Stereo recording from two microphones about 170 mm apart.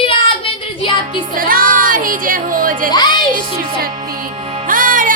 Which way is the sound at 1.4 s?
55° right (ahead or behind).